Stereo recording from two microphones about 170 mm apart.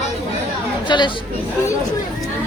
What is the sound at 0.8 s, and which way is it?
Speech, 25° left (ahead or behind).